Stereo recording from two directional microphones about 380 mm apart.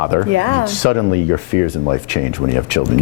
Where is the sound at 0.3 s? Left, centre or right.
Right.